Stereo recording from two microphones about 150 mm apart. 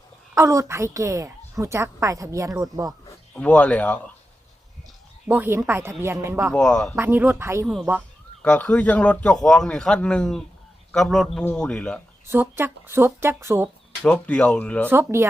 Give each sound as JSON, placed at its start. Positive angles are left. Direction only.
{"t": 0.3, "sound": "a woman's voice", "side_deg": -20}
{"t": 3.3, "sound": "a man's voice", "side_deg": 10}
{"t": 5.3, "sound": "speech", "side_deg": -15}
{"t": 6.5, "sound": "speech", "side_deg": 5}
{"t": 6.9, "sound": "speech", "side_deg": -15}
{"t": 8.4, "sound": "a man's voice", "side_deg": 10}
{"t": 12.3, "sound": "speech", "side_deg": -15}
{"t": 14.0, "sound": "a man's voice", "side_deg": 10}
{"t": 14.8, "sound": "speech", "side_deg": -15}